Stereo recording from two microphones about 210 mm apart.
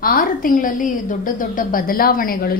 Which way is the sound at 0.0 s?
40° left (ahead or behind).